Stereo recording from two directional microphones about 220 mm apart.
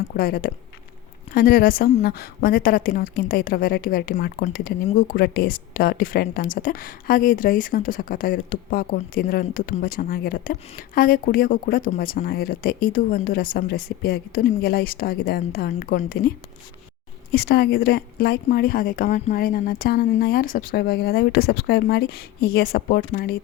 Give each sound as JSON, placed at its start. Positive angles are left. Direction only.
{"t": 0.1, "sound": "speech", "side_deg": 40}
{"t": 17.3, "sound": "speech", "side_deg": 45}